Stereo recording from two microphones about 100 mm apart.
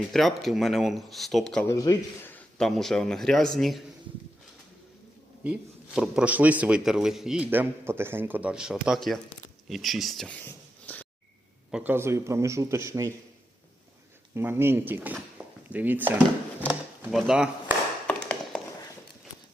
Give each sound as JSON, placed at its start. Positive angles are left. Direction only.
{"t": 0.1, "sound": "speech", "side_deg": 0}
{"t": 1.6, "sound": "a man's voice", "side_deg": 35}
{"t": 2.6, "sound": "speech", "side_deg": 5}
{"t": 5.4, "sound": "a man's voice", "side_deg": -10}
{"t": 7.5, "sound": "a man's voice", "side_deg": -20}
{"t": 10.2, "sound": "a sound", "side_deg": 15}
{"t": 11.7, "sound": "a man's voice", "side_deg": -15}
{"t": 14.3, "sound": "a man's voice", "side_deg": -25}
{"t": 15.4, "sound": "a sound", "side_deg": -15}
{"t": 15.7, "sound": "a man's voice", "side_deg": -20}
{"t": 17.1, "sound": "speech", "side_deg": -5}
{"t": 18.1, "sound": "tap", "side_deg": 10}